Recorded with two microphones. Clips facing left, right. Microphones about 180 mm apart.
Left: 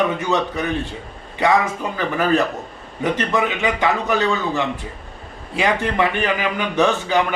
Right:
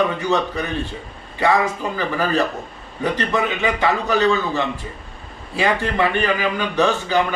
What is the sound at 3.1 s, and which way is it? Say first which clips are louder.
A man's voice: even; 15° left (ahead or behind).